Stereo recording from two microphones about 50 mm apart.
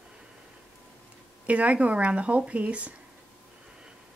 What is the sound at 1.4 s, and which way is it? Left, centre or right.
A woman's voice, right.